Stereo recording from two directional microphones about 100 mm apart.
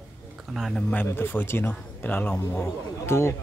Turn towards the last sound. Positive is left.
turn(degrees=25)  # may be behind; listen again after turning